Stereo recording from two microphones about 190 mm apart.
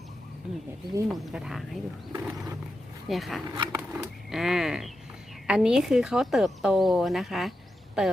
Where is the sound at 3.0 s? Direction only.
Centre (ahead or behind).